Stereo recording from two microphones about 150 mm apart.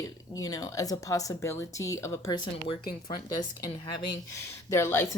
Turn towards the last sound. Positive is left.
turn(degrees=20)  # may be behind; listen again after turning